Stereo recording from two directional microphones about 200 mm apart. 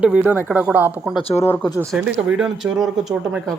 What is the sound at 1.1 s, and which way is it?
Speech, 30° left (ahead or behind).